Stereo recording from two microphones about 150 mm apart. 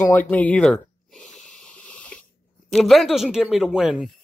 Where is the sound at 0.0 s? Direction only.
15° left (ahead or behind).